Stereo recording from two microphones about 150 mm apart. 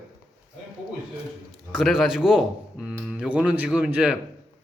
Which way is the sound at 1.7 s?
5° right (ahead or behind).